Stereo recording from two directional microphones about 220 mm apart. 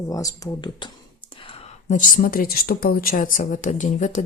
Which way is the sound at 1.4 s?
30° left (ahead or behind).